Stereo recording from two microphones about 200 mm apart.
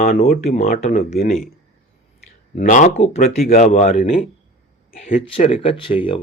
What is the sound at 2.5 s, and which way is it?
Speech, 40° left (ahead or behind).